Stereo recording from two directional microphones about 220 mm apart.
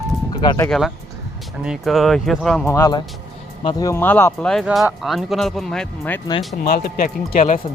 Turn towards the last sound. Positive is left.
turn(degrees=40)  # may be behind; listen again after turning